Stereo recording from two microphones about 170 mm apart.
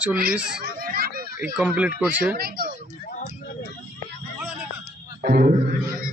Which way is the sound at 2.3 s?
60° right (ahead or behind).